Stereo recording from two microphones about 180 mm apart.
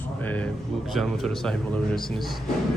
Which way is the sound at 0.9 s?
Centre (ahead or behind).